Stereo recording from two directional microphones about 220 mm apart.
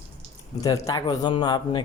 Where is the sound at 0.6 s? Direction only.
20° left (ahead or behind).